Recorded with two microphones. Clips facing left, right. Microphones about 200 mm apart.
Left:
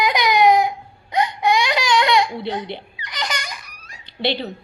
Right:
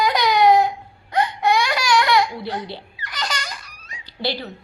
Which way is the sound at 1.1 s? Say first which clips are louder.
Even; 15° left (ahead or behind).